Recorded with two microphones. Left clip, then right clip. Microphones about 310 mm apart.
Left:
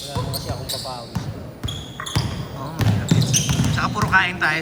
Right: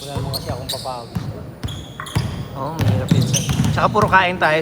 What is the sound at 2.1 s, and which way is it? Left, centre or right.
Basketball bounce, centre.